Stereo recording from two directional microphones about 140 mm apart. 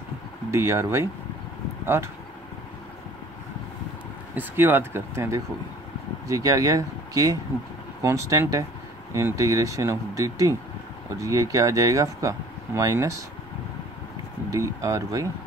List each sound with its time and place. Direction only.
0.5 s speech: 20° right (ahead or behind)
4.4 s speech: 15° right (ahead or behind)
14.5 s speech: 20° right (ahead or behind)